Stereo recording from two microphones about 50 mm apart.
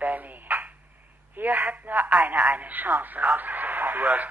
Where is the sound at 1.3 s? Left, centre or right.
Right.